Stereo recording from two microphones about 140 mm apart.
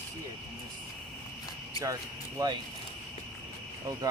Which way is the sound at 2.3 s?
30° right (ahead or behind).